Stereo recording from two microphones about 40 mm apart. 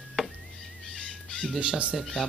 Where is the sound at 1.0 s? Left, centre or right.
Left.